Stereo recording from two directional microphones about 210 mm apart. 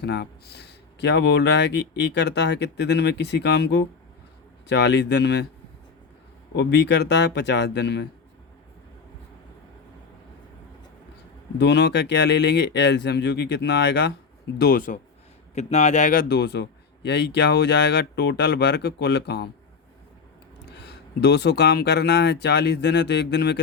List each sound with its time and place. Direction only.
0.0 s speech: 50° left (ahead or behind)
6.6 s speech: 55° left (ahead or behind)
11.5 s speech: 55° left (ahead or behind)
14.6 s a man's voice: 40° left (ahead or behind)
16.3 s speech: 55° left (ahead or behind)
20.7 s speech: 55° left (ahead or behind)